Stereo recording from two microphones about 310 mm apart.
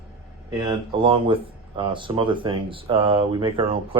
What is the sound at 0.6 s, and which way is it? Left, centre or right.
Speech, centre.